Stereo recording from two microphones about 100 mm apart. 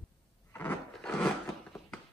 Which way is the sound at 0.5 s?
15° left (ahead or behind).